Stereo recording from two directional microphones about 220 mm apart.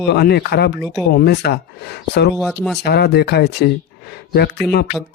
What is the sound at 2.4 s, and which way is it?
Speech, centre (ahead or behind).